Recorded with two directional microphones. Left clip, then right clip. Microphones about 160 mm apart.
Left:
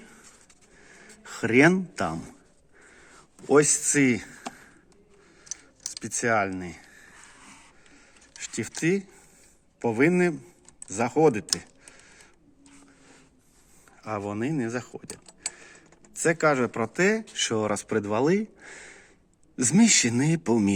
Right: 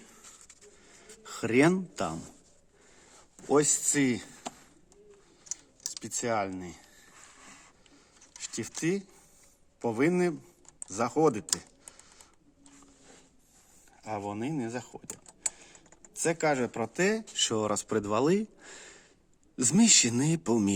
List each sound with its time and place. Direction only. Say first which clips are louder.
1.0 s speech: left 5 dB; 10° right (ahead or behind)
3.4 s speech: left 5 dB; centre (ahead or behind)
6.0 s speech: left 6 dB; 10° left (ahead or behind)
8.4 s speech: left 5 dB; 5° left (ahead or behind)
10.8 s computer keyboard: left 4 dB; centre (ahead or behind)
14.0 s speech: left 4 dB; centre (ahead or behind); by 20.7 s 15° right (ahead or behind)